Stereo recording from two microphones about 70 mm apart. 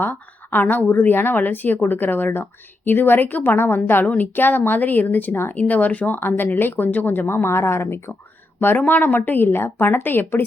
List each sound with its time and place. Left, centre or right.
0.0 s a woman's voice: left